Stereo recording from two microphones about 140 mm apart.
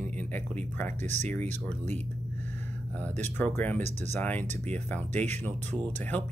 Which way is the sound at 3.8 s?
55° right (ahead or behind).